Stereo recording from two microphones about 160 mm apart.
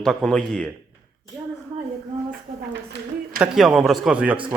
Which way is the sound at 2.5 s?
35° right (ahead or behind).